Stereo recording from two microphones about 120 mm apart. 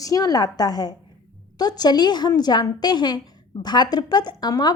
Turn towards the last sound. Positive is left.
turn(degrees=35)  # may be behind; listen again after turning